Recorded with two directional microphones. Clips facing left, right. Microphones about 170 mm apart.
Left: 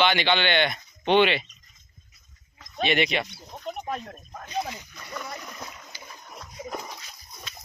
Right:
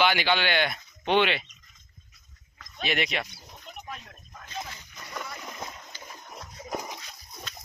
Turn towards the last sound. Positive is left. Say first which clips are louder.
# right 1 dB
turn(degrees=-10)  # may be behind; listen again after turning